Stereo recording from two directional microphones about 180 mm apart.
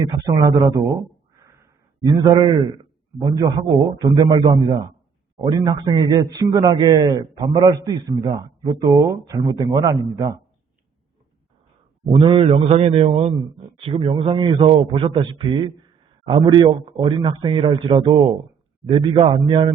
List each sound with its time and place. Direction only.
0.0 s a man's voice: 20° right (ahead or behind)
12.0 s a man's voice: 30° right (ahead or behind)